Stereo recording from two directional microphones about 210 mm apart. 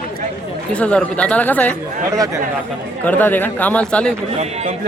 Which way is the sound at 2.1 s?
15° right (ahead or behind).